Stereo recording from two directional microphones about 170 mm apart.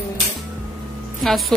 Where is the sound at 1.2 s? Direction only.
Centre (ahead or behind).